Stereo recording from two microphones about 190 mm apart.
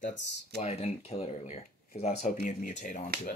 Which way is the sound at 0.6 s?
35° left (ahead or behind).